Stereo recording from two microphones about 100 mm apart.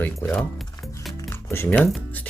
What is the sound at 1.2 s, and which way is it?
Music, 25° left (ahead or behind).